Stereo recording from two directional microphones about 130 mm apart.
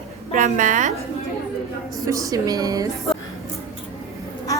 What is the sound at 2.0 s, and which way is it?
Speech, 25° right (ahead or behind).